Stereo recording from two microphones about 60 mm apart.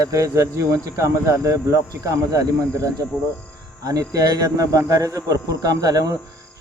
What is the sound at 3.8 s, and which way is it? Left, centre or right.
Speech, right.